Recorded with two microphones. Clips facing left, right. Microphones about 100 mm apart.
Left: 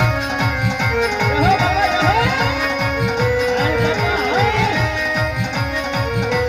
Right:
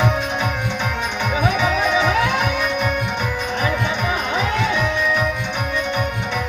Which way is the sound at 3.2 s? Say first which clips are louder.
Left 6 dB; 90° left.